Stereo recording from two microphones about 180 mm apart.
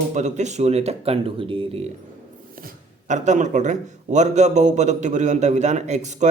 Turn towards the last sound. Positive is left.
turn(degrees=-40)  # may be behind; listen again after turning